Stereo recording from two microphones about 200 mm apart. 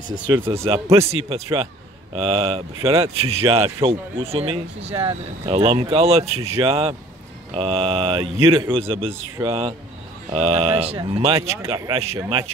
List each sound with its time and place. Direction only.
0.4 s speech: 15° right (ahead or behind)
1.3 s speech: 30° right (ahead or behind)
11.3 s speech: 15° right (ahead or behind)